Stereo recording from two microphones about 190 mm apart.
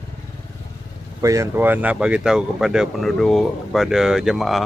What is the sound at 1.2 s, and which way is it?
Speech, 15° right (ahead or behind).